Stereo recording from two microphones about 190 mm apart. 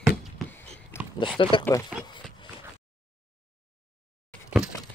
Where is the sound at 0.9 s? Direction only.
10° left (ahead or behind).